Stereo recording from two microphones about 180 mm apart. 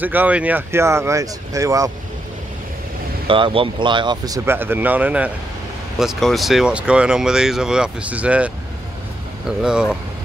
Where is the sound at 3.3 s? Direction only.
30° right (ahead or behind); by 8.5 s 5° right (ahead or behind).